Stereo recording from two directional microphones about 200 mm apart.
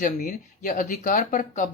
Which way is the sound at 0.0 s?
40° left (ahead or behind).